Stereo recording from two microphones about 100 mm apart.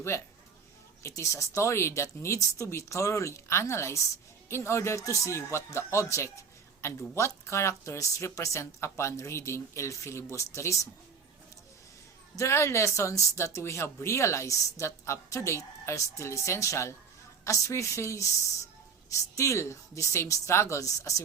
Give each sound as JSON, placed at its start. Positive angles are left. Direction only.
{"t": 1.0, "sound": "speech", "side_deg": 30}
{"t": 12.4, "sound": "speech", "side_deg": 25}